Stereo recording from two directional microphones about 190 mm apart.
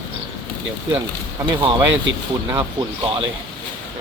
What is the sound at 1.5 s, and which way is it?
Speech, 25° right (ahead or behind).